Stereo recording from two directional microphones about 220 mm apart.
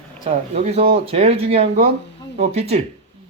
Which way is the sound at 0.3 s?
30° right (ahead or behind).